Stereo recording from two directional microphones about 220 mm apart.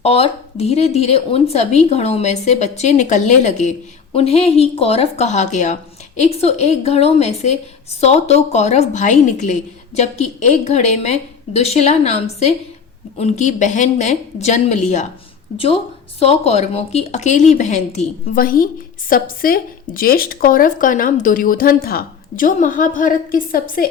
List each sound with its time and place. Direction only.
0.0 s a woman's voice: 25° left (ahead or behind)